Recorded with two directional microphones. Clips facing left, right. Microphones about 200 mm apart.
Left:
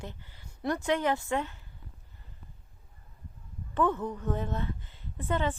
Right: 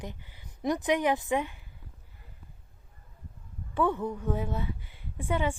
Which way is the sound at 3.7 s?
10° right (ahead or behind).